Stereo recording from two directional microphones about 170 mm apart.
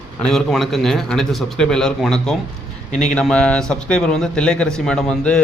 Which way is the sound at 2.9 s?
45° left (ahead or behind).